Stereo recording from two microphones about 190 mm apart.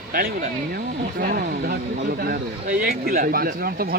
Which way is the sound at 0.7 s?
50° right (ahead or behind).